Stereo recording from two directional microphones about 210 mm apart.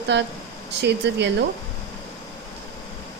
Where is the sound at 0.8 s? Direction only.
55° right (ahead or behind).